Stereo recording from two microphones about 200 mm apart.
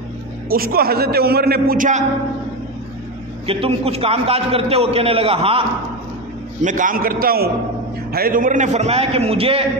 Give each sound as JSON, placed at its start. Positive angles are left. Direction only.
{"t": 0.5, "sound": "a man's voice", "side_deg": -50}
{"t": 3.4, "sound": "a man's voice", "side_deg": -30}
{"t": 6.6, "sound": "a man's voice", "side_deg": -40}